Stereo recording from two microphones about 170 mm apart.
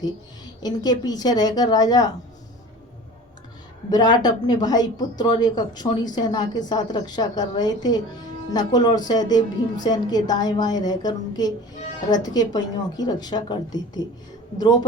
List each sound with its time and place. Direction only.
0.6 s a woman's voice: 25° left (ahead or behind)
3.8 s a woman's voice: 25° left (ahead or behind)